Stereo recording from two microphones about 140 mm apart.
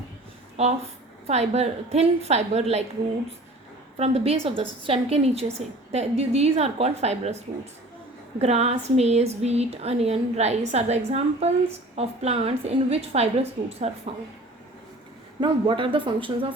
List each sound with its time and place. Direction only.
0.6 s a woman's voice: 50° right (ahead or behind)
3.9 s a woman's voice: 45° right (ahead or behind)
15.4 s speech: 35° right (ahead or behind)